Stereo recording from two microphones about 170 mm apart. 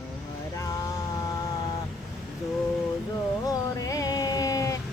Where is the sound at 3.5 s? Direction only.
20° left (ahead or behind).